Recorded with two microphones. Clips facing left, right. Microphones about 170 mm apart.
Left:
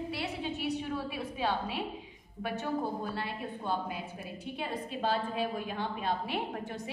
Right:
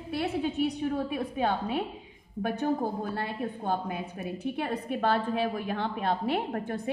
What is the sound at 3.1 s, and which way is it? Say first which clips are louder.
A woman's voice: right 5 dB; 50° right (ahead or behind).